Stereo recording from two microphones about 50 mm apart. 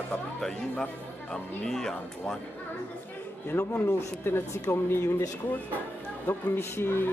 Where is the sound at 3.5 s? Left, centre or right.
Left.